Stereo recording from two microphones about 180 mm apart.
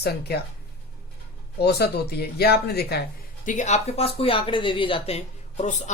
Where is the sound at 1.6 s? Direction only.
60° left (ahead or behind).